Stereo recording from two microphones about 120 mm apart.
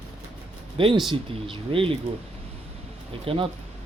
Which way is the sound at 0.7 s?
45° right (ahead or behind).